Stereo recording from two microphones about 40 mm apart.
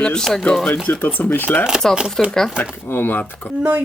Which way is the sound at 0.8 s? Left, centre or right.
Left.